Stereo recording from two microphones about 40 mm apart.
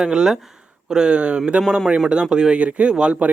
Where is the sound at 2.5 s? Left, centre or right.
Right.